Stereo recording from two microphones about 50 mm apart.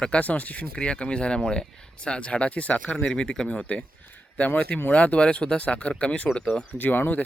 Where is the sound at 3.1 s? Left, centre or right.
Centre.